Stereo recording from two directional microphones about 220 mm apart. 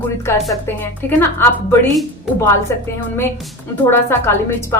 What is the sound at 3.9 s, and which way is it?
Speech, 10° left (ahead or behind).